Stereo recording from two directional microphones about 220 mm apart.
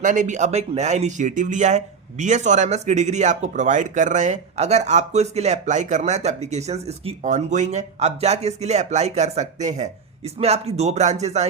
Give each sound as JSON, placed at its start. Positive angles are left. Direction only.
{"t": 0.0, "sound": "speech", "side_deg": -35}